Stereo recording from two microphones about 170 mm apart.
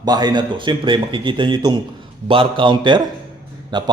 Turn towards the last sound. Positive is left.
turn(degrees=-25)  # may be behind; listen again after turning